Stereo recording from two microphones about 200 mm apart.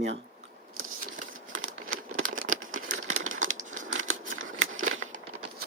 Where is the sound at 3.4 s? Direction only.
40° right (ahead or behind).